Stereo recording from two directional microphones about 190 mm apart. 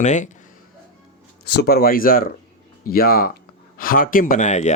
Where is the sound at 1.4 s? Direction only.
55° left (ahead or behind).